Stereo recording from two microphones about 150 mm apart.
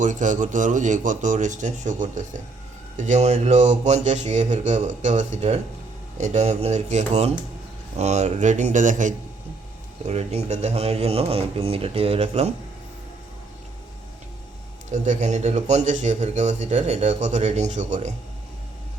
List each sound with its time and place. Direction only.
0.0 s a man's voice: 55° right (ahead or behind)
14.8 s a man's voice: 55° right (ahead or behind)